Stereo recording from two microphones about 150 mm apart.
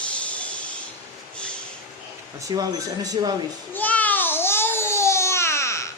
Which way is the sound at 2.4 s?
25° right (ahead or behind).